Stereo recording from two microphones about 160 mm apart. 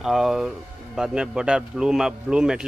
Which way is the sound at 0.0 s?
Centre (ahead or behind).